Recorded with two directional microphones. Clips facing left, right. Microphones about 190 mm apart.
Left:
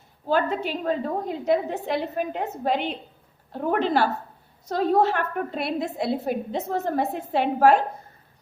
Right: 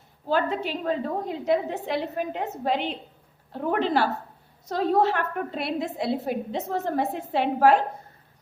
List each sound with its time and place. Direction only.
0.3 s a woman's voice: 45° left (ahead or behind)